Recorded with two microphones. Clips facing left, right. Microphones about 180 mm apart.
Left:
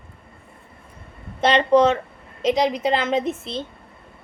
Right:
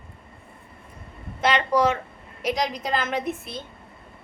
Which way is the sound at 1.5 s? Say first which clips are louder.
Left 5 dB; 25° left (ahead or behind).